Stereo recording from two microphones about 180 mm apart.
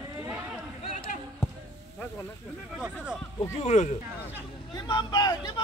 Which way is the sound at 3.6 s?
40° left (ahead or behind).